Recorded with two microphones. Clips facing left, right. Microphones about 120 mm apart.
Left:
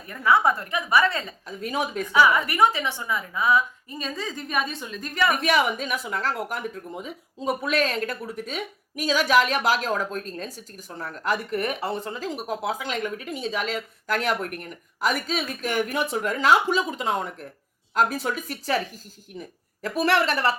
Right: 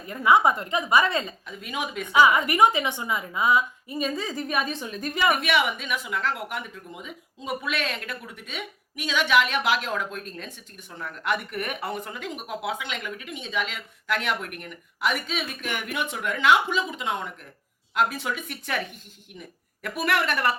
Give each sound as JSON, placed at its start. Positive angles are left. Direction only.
{"t": 0.1, "sound": "a woman's voice", "side_deg": -15}
{"t": 1.5, "sound": "speech", "side_deg": 35}
{"t": 2.1, "sound": "a woman's voice", "side_deg": -20}
{"t": 3.9, "sound": "a woman's voice", "side_deg": -5}
{"t": 5.3, "sound": "a woman's voice", "side_deg": 40}